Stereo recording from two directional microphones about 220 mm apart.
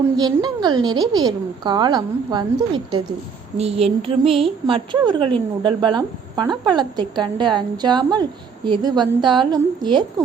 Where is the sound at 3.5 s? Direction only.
25° right (ahead or behind).